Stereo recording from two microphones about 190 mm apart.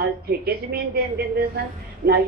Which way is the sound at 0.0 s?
55° right (ahead or behind).